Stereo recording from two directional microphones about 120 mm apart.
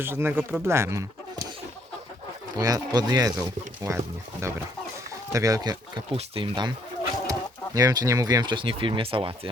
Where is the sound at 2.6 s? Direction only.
30° right (ahead or behind).